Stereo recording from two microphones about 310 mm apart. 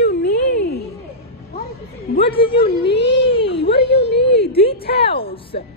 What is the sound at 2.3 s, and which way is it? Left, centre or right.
Speech, centre.